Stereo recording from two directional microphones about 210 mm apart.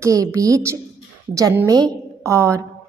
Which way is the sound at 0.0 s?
15° right (ahead or behind).